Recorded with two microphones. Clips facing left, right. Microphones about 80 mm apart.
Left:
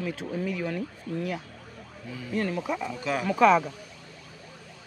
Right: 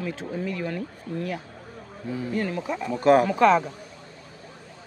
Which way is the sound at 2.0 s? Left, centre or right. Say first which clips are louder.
Right 9 dB; right.